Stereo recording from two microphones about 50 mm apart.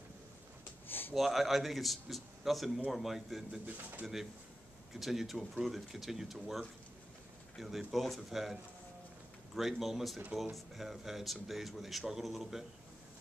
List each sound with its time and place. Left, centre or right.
0.8 s a sound: left
1.1 s speech: centre
3.6 s speech: right
4.0 s a man's voice: centre
9.6 s a man's voice: centre